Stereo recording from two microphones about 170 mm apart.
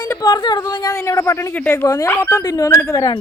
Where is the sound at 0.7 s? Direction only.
20° left (ahead or behind).